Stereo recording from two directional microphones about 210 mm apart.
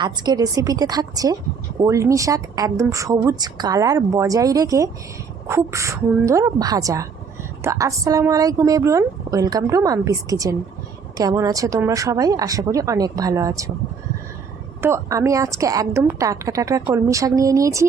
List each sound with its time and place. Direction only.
0.0 s a woman's voice: 20° right (ahead or behind)
14.8 s a woman's voice: 10° right (ahead or behind)